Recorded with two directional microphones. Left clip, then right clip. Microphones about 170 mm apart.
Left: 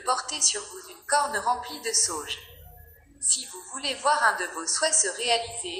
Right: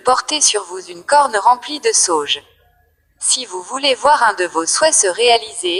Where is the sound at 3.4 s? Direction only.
50° right (ahead or behind).